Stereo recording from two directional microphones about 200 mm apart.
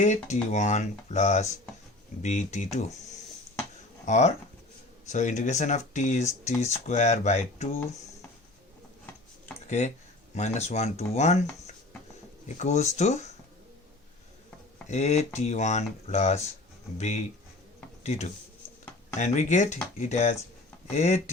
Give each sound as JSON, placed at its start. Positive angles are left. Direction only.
{"t": 0.0, "sound": "speech", "side_deg": 35}
{"t": 9.6, "sound": "speech", "side_deg": 35}
{"t": 14.8, "sound": "speech", "side_deg": 35}
{"t": 18.0, "sound": "speech", "side_deg": 35}